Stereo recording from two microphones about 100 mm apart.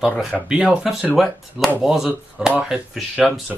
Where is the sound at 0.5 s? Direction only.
10° right (ahead or behind).